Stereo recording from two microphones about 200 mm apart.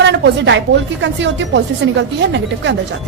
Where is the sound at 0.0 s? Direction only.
65° right (ahead or behind).